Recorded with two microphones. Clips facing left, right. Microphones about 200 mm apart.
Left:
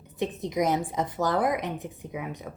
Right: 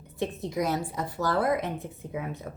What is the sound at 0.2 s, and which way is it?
A woman's voice, 20° left (ahead or behind).